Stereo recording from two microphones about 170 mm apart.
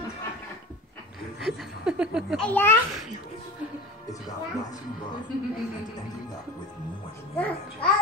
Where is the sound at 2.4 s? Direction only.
10° left (ahead or behind).